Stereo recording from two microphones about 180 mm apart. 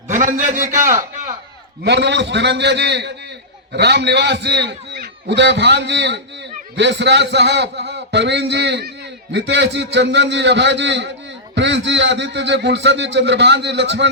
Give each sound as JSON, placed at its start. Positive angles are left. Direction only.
{"t": 0.1, "sound": "a man's voice", "side_deg": -45}
{"t": 1.8, "sound": "a man's voice", "side_deg": -70}